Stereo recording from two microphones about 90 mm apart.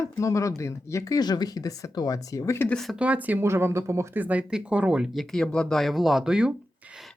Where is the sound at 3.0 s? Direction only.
15° right (ahead or behind).